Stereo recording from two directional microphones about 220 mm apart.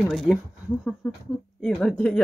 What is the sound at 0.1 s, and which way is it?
Speech, centre (ahead or behind).